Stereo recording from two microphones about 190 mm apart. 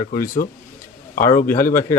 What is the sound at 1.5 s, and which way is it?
Speech, 45° left (ahead or behind).